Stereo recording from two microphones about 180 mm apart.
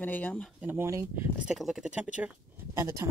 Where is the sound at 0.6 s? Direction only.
10° right (ahead or behind).